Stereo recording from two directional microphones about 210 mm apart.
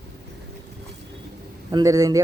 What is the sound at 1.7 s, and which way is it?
Speech, 15° right (ahead or behind).